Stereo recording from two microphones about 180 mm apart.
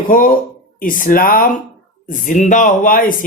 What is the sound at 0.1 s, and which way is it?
Speech, 50° left (ahead or behind).